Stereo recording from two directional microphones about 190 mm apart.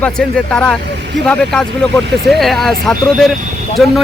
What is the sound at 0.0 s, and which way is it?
Speech, 5° left (ahead or behind).